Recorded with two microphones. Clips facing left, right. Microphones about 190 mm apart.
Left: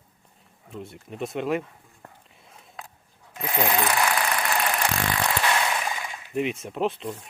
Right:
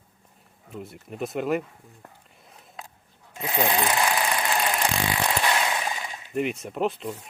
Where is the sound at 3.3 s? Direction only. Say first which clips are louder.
Even; 20° right (ahead or behind).